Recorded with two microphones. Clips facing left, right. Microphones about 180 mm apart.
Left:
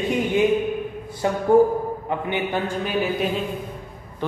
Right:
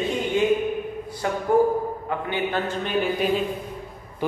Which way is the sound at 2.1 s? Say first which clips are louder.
Left 1 dB; 20° left (ahead or behind).